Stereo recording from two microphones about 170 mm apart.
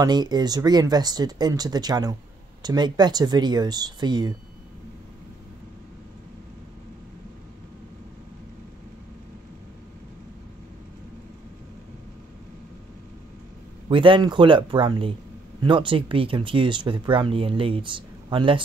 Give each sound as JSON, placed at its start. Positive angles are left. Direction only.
{"t": 0.0, "sound": "speech", "side_deg": -25}
{"t": 13.8, "sound": "speech", "side_deg": -30}